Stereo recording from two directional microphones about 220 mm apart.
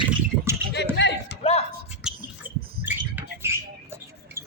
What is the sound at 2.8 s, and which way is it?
Rodents, 10° right (ahead or behind).